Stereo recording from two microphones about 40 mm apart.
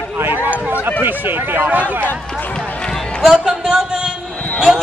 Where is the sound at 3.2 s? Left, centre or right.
Right.